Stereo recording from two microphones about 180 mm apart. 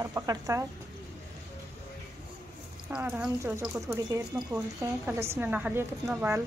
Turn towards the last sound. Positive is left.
turn(degrees=-10)  # may be behind; listen again after turning